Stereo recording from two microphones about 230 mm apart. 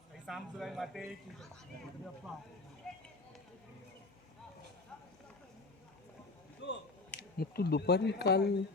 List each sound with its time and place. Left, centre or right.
0.3 s speech: centre
2.8 s speech: centre
6.6 s speech: left